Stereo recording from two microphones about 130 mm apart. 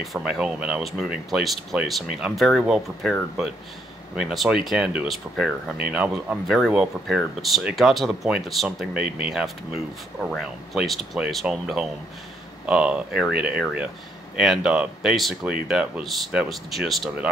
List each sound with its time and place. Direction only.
0.0 s speech: 5° right (ahead or behind)